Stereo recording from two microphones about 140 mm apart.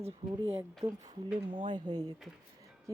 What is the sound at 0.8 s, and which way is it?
Speech, 25° right (ahead or behind).